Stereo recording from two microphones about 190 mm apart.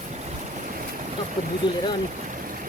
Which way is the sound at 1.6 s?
25° left (ahead or behind).